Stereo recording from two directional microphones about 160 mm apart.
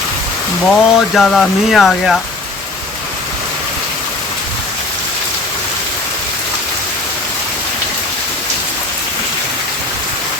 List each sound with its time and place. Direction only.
0.7 s speech: 5° left (ahead or behind)